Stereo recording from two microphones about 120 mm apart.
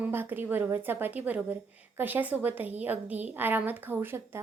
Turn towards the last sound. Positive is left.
turn(degrees=-20)  # may be behind; listen again after turning